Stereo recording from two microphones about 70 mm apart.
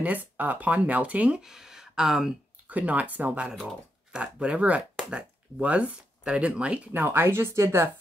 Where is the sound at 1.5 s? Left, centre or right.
Centre.